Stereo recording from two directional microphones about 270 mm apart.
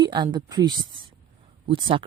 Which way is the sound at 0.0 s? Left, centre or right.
Centre.